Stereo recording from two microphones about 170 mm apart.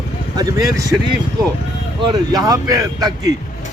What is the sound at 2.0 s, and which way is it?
A man's voice, 25° right (ahead or behind).